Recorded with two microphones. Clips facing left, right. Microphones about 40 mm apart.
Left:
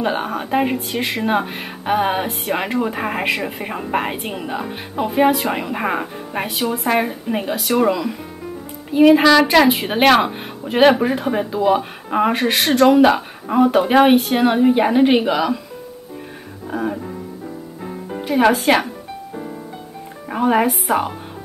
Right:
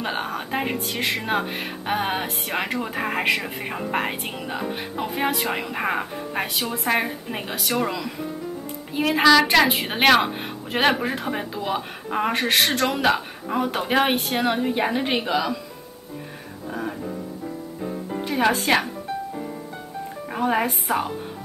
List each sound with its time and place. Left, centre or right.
0.0 s speech: centre
16.7 s music: centre
18.1 s a woman's voice: centre
20.2 s speech: centre